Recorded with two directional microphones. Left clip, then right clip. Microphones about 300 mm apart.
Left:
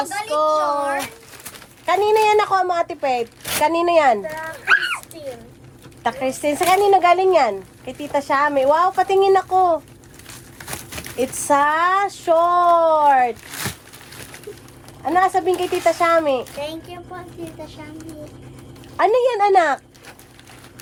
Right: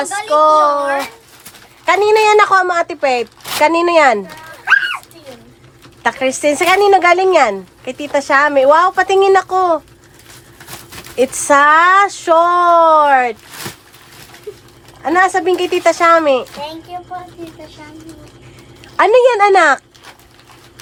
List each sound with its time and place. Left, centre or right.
0.0 s speech: right
6.0 s speech: right
11.2 s speech: right
15.0 s speech: right
18.9 s speech: right